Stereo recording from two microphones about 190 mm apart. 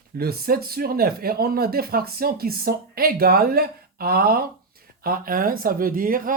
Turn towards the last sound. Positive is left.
turn(degrees=-45)  # may be behind; listen again after turning